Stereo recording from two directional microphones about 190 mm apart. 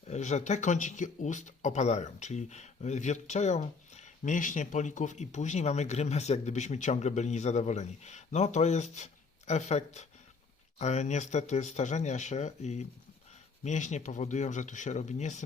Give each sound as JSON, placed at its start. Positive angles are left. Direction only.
{"t": 0.1, "sound": "speech", "side_deg": 35}